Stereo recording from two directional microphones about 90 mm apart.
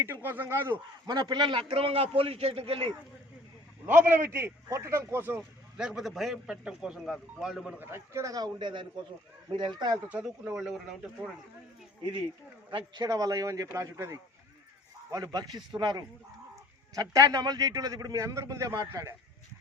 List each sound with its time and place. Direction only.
0.0 s a man's voice: 25° right (ahead or behind)
1.0 s a man's voice: 50° right (ahead or behind); by 2.9 s 90° right
3.8 s a man's voice: 25° right (ahead or behind)
5.7 s a man's voice: 10° right (ahead or behind)
7.8 s a man's voice: 25° right (ahead or behind)
8.5 s speech: 60° right (ahead or behind)
10.1 s a man's voice: 10° right (ahead or behind)
13.0 s a man's voice: 40° right (ahead or behind)
15.1 s a man's voice: 45° right (ahead or behind)